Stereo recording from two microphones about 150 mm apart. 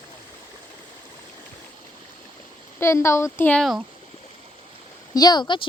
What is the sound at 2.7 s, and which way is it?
Speech, 20° left (ahead or behind).